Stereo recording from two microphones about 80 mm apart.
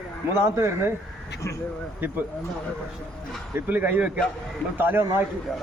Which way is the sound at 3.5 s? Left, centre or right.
Right.